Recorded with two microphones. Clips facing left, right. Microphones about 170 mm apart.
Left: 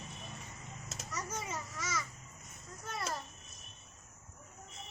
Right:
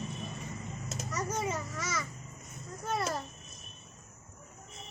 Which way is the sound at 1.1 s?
65° right (ahead or behind).